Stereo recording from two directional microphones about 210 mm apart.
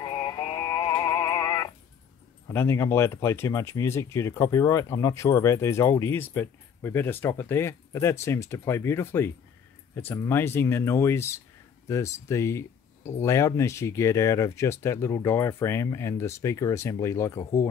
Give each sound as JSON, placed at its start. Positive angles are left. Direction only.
{"t": 0.0, "sound": "synthetic singing", "side_deg": 20}
{"t": 2.4, "sound": "speech", "side_deg": 10}